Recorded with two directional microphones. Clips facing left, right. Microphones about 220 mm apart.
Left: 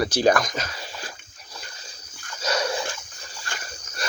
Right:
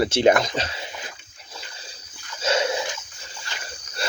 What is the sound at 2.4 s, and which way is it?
Dog, 25° right (ahead or behind).